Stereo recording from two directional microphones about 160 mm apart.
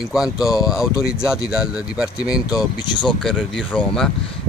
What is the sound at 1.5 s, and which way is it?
Speech, 5° right (ahead or behind).